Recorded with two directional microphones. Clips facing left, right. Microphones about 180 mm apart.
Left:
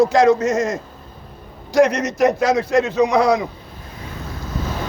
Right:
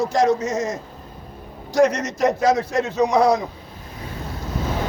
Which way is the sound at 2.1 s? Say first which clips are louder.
Left 2 dB; 70° left (ahead or behind).